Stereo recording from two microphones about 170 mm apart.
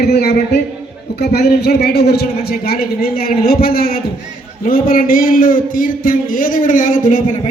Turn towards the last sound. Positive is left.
turn(degrees=50)  # may be behind; listen again after turning